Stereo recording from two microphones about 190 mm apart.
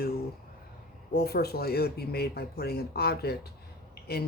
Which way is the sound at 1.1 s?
55° left (ahead or behind).